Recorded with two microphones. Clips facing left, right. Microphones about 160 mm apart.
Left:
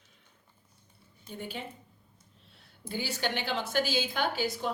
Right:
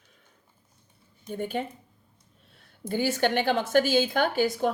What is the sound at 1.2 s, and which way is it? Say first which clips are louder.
Speech: right 9 dB; 50° right (ahead or behind).